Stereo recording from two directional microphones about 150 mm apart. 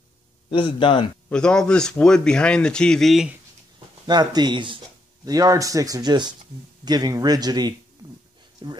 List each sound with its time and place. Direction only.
0.5 s speech: 35° left (ahead or behind)
1.3 s speech: 5° left (ahead or behind)
4.1 s speech: 30° right (ahead or behind)